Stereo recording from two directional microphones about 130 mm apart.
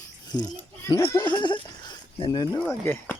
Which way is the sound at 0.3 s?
35° left (ahead or behind).